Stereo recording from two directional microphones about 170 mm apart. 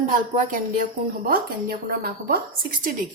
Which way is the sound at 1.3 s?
60° right (ahead or behind).